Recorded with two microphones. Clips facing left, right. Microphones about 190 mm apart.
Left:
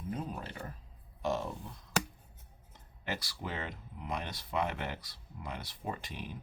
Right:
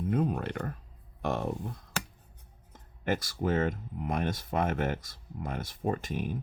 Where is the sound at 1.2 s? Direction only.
60° right (ahead or behind).